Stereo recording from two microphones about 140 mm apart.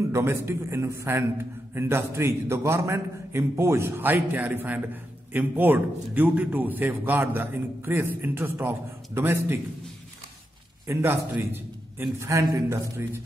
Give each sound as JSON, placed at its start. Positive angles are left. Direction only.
{"t": 0.1, "sound": "a man's voice", "side_deg": -20}
{"t": 10.9, "sound": "a man's voice", "side_deg": -15}